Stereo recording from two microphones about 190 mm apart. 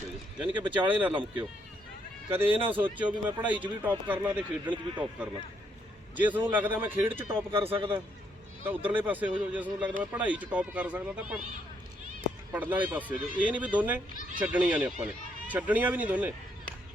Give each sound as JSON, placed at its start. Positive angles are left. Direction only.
{"t": 0.3, "sound": "speech", "side_deg": -10}
{"t": 7.5, "sound": "a man's voice", "side_deg": -30}
{"t": 8.6, "sound": "speech", "side_deg": -10}
{"t": 12.5, "sound": "speech", "side_deg": -10}